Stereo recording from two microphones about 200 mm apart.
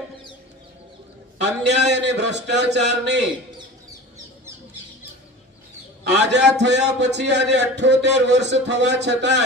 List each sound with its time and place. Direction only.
1.4 s a man's voice: 60° right (ahead or behind)
6.1 s a man's voice: 60° right (ahead or behind)